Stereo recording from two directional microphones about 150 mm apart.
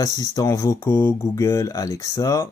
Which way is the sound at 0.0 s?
25° left (ahead or behind).